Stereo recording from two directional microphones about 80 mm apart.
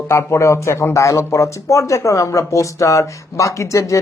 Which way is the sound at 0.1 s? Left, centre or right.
Left.